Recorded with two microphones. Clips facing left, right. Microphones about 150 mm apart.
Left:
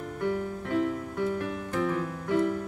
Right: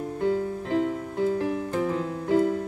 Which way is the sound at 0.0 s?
30° right (ahead or behind).